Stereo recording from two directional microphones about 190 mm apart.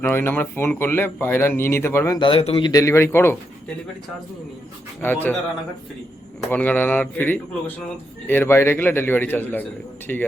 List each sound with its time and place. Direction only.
0.0 s speech: 10° left (ahead or behind)
2.2 s speech: 30° left (ahead or behind); by 3.3 s 10° left (ahead or behind)
4.9 s speech: 10° left (ahead or behind)
6.5 s speech: 10° left (ahead or behind)